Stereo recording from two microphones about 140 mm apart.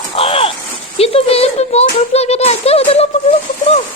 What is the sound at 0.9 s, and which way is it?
Speech, 45° left (ahead or behind).